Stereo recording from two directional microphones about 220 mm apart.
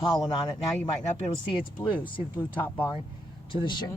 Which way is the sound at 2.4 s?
10° left (ahead or behind).